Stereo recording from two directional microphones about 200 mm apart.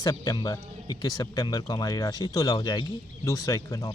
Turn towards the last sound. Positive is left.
turn(degrees=15)  # may be behind; listen again after turning